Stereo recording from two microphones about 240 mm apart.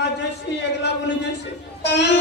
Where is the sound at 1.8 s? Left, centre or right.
Left.